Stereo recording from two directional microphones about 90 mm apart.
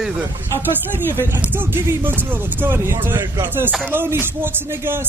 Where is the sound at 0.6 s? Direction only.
25° right (ahead or behind).